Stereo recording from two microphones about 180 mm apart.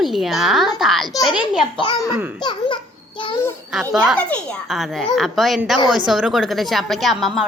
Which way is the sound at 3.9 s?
Centre (ahead or behind).